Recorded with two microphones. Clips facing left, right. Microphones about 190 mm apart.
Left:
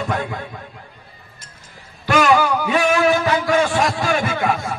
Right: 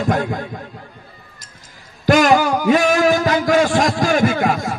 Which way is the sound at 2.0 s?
45° right (ahead or behind).